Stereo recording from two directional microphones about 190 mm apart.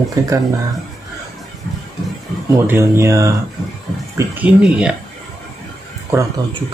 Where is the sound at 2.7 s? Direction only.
15° right (ahead or behind).